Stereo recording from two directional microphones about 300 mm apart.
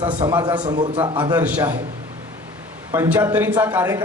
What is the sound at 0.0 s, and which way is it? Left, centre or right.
A man's voice, centre.